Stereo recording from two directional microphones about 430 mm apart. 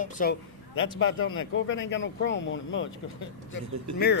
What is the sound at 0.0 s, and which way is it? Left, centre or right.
Speech, centre.